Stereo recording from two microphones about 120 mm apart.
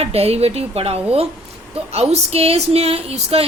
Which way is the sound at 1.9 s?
60° right (ahead or behind).